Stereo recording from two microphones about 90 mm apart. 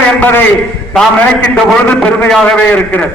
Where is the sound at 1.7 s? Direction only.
10° left (ahead or behind).